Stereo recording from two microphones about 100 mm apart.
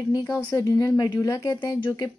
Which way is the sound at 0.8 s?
40° left (ahead or behind).